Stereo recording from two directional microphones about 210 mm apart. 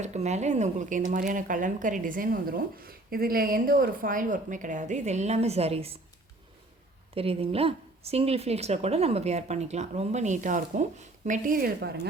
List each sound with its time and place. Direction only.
0.0 s a woman's voice: 35° right (ahead or behind)
7.2 s a woman's voice: 25° right (ahead or behind); by 11.9 s 45° right (ahead or behind)